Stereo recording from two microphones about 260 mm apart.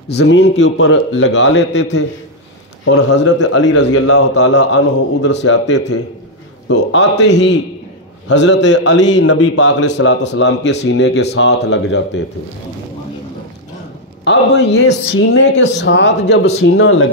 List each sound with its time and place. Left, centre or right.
0.1 s a man's voice: left
2.8 s speech: left
4.5 s a man's voice: left
14.2 s a man's voice: left